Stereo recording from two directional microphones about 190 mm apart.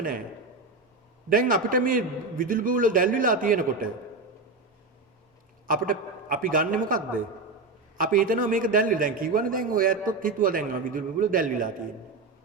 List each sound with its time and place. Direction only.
1.3 s a man's voice: 45° right (ahead or behind)
5.6 s a man's voice: 45° right (ahead or behind)